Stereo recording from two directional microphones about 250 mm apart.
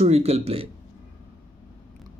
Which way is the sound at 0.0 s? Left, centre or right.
Right.